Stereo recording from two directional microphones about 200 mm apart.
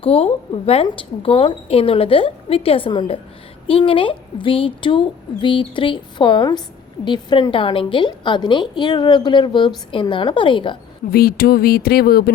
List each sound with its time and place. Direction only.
0.0 s a woman's voice: 30° left (ahead or behind)
11.1 s speech: 50° left (ahead or behind)